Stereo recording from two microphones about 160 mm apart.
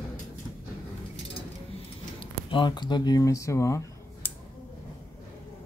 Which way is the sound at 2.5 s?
30° left (ahead or behind).